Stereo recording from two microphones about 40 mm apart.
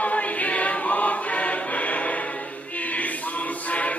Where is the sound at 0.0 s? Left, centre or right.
Left.